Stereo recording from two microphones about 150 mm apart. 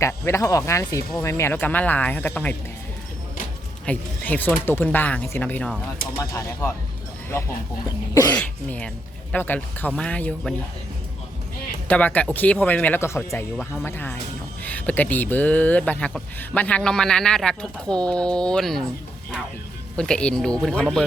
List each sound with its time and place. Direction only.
0.0 s speech: 20° left (ahead or behind)
3.8 s speech: 10° left (ahead or behind)
6.1 s speech: 20° left (ahead or behind)
11.9 s speech: 10° left (ahead or behind)
13.3 s speech: centre (ahead or behind)
13.8 s speech: 15° left (ahead or behind)
20.0 s speech: 5° left (ahead or behind)